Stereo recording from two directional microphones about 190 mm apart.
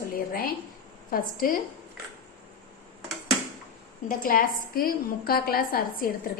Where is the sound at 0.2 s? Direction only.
50° left (ahead or behind).